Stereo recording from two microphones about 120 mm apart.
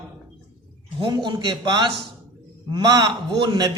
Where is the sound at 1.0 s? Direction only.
40° right (ahead or behind).